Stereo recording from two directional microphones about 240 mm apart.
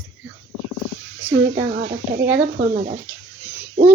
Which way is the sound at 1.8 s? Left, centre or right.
Right.